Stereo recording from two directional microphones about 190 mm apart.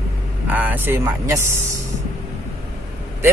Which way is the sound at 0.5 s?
10° right (ahead or behind).